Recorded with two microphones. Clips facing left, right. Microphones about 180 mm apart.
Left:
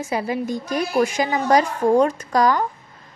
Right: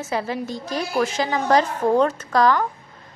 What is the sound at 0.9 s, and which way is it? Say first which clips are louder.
A woman's voice: left 2 dB; 15° left (ahead or behind).